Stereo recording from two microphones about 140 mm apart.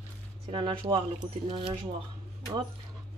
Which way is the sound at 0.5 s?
40° right (ahead or behind).